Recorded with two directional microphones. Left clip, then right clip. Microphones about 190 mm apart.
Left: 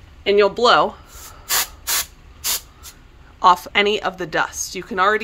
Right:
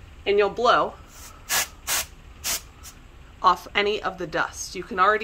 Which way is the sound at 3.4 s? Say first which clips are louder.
Left 6 dB; 45° left (ahead or behind).